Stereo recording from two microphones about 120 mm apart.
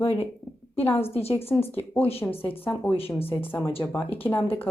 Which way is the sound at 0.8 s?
20° left (ahead or behind).